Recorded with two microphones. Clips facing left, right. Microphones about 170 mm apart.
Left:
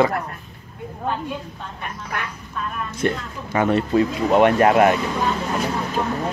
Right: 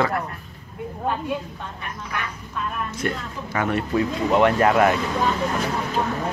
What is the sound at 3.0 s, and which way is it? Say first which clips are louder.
Speech: left 8 dB; 25° left (ahead or behind).